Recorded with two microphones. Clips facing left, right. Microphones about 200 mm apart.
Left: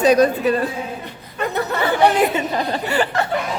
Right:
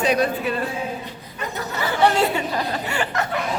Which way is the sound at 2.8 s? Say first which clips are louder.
Left 5 dB; 35° left (ahead or behind).